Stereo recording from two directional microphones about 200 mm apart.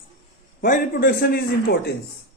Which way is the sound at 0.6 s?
40° left (ahead or behind).